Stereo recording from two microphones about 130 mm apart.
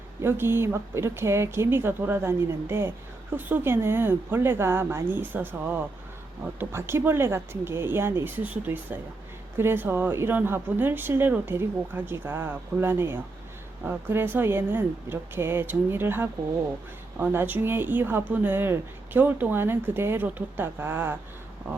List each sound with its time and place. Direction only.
0.2 s speech: 20° right (ahead or behind)